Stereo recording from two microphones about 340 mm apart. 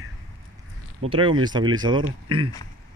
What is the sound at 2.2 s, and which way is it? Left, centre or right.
Speech, right.